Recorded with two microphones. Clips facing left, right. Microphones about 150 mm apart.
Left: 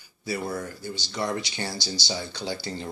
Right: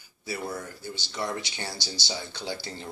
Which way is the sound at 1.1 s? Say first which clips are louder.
Left 3 dB; 15° left (ahead or behind).